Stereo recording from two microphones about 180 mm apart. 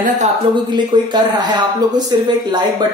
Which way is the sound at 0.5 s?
25° right (ahead or behind).